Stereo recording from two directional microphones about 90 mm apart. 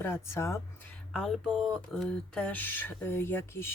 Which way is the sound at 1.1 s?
Centre (ahead or behind).